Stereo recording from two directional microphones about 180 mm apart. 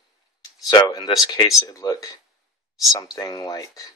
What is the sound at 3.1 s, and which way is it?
Speech, 20° left (ahead or behind).